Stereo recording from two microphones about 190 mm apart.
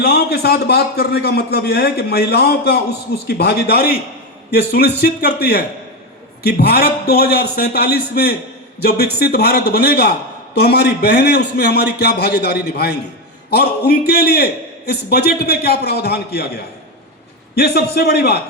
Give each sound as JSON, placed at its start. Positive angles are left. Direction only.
{"t": 0.0, "sound": "a man's voice", "side_deg": 55}
{"t": 17.5, "sound": "a man's voice", "side_deg": 55}